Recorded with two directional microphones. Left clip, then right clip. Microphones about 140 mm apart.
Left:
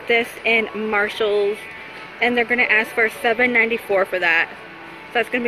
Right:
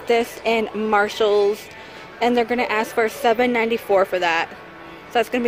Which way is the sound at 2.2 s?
30° right (ahead or behind).